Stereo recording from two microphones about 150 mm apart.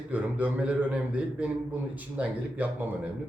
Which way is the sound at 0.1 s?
10° right (ahead or behind).